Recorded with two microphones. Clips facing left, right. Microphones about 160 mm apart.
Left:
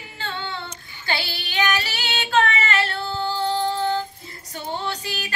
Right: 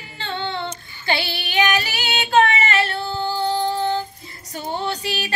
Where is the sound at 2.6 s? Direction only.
20° right (ahead or behind).